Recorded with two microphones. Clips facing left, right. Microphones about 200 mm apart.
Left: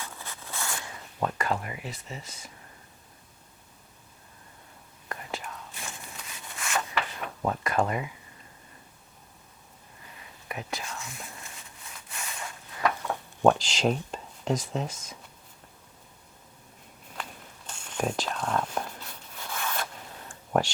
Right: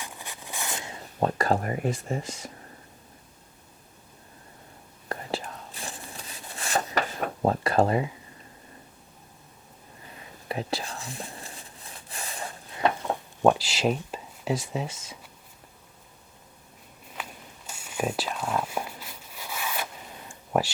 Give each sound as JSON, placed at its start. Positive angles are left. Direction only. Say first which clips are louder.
{"t": 0.0, "sound": "zipper", "louder": "right 1 dB", "side_deg": -15}
{"t": 5.0, "sound": "whispering", "louder": "right 5 dB", "side_deg": -35}
{"t": 10.2, "sound": "whispering", "louder": "right 6 dB", "side_deg": -30}
{"t": 13.4, "sound": "speech", "louder": "even", "side_deg": -5}
{"t": 17.7, "sound": "whispering", "louder": "right 1 dB", "side_deg": -5}